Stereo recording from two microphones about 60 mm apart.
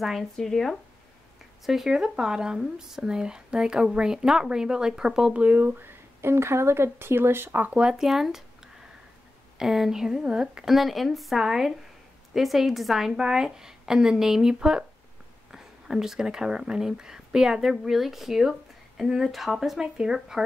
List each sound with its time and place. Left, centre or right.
0.0 s speech: centre
1.7 s speech: centre
5.4 s speech: right
7.7 s speech: centre
9.6 s speech: centre